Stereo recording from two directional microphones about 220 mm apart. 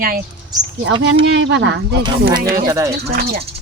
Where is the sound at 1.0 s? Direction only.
55° right (ahead or behind).